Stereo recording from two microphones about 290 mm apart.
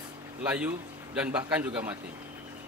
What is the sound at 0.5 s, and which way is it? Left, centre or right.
Speech, centre.